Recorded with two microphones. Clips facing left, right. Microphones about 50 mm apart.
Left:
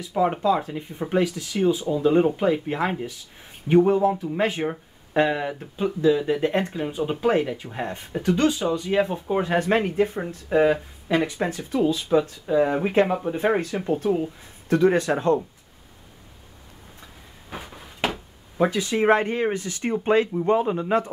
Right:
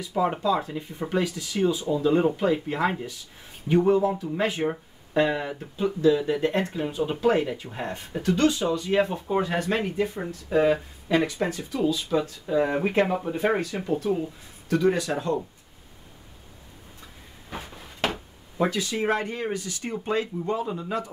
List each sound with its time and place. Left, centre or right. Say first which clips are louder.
0.4 s speech: left 3 dB; left
12.2 s speech: left 3 dB; centre
13.4 s speech: left 2 dB; left
17.5 s a sound: left 1 dB; centre
18.6 s speech: left 4 dB; left